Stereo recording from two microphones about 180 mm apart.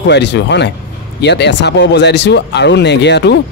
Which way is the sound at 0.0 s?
75° left (ahead or behind).